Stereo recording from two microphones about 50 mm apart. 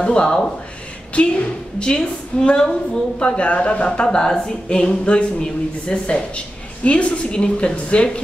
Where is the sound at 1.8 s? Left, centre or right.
Centre.